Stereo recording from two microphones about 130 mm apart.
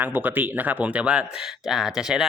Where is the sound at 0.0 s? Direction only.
15° right (ahead or behind).